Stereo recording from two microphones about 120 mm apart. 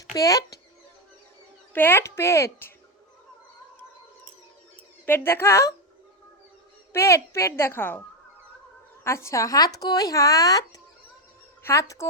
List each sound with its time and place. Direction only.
0.2 s speech: 30° left (ahead or behind)
1.7 s speech: 15° left (ahead or behind)
5.0 s speech: 20° left (ahead or behind)
6.9 s speech: 20° left (ahead or behind)
9.0 s speech: 25° left (ahead or behind)